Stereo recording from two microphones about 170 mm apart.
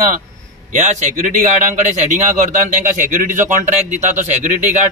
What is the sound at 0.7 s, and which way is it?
A man's voice, 45° right (ahead or behind).